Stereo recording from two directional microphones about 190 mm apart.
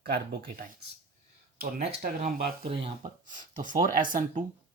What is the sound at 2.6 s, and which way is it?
Speech, 30° right (ahead or behind).